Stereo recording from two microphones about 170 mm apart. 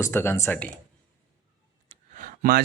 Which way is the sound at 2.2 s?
55° right (ahead or behind).